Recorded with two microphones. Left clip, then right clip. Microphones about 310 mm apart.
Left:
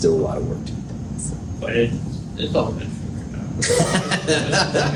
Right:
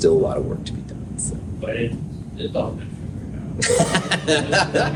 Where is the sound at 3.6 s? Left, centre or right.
Right.